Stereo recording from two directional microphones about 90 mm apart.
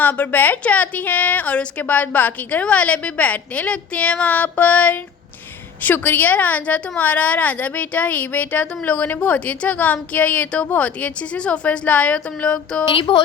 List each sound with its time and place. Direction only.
0.0 s a woman's voice: 20° left (ahead or behind)
12.9 s speech: 70° left (ahead or behind)